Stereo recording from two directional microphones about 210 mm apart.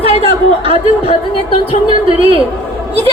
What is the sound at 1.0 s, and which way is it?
Speech, 30° left (ahead or behind).